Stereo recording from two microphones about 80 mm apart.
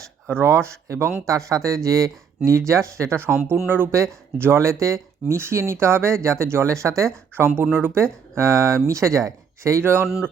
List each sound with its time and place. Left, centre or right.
0.3 s speech: right
8.4 s speech: right